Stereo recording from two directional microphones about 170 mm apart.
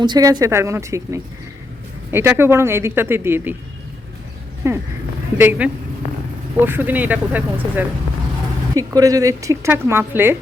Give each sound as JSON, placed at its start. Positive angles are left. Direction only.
{"t": 0.0, "sound": "speech", "side_deg": -25}
{"t": 4.6, "sound": "speech", "side_deg": -15}